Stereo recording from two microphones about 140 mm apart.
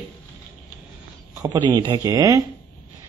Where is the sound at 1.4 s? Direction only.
30° right (ahead or behind).